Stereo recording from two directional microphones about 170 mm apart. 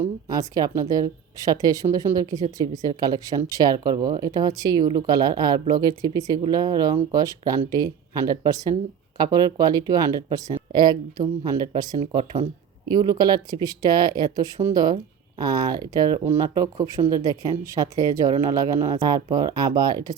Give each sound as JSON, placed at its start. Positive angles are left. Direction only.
{"t": 0.0, "sound": "speech", "side_deg": -20}
{"t": 11.9, "sound": "speech", "side_deg": -40}
{"t": 12.9, "sound": "speech", "side_deg": -25}